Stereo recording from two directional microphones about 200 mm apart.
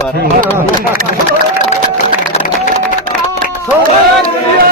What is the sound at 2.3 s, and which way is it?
Music, 40° left (ahead or behind).